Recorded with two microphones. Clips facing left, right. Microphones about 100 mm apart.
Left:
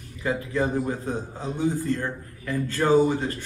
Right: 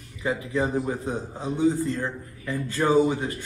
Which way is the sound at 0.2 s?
15° right (ahead or behind).